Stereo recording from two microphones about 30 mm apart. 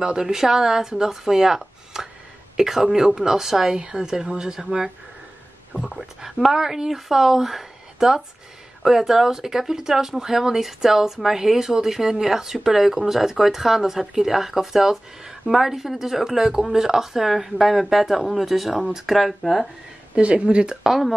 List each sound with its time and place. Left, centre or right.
0.2 s speech: centre
2.0 s a sound: centre
2.5 s speech: centre
3.7 s speech: right
5.7 s speech: right
6.5 s speech: centre
20.2 s speech: right